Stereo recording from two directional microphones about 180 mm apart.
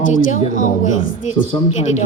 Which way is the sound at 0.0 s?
45° left (ahead or behind).